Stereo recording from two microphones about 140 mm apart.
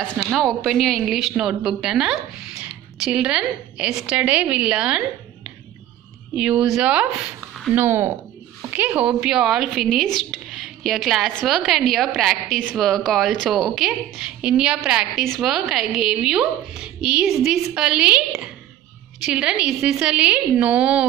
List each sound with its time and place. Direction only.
0.0 s a woman's voice: 5° left (ahead or behind)
6.3 s a woman's voice: 5° right (ahead or behind)